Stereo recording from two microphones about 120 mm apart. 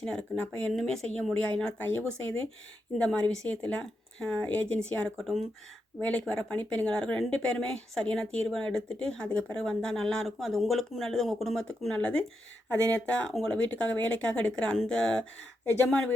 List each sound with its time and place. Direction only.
0.0 s speech: 10° left (ahead or behind)
5.2 s speech: centre (ahead or behind)
6.0 s speech: 10° left (ahead or behind)
12.9 s speech: 10° left (ahead or behind)